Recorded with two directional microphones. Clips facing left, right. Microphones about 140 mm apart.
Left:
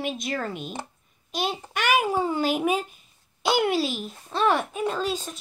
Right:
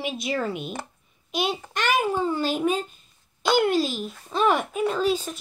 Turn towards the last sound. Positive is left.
turn(degrees=-5)  # may be behind; listen again after turning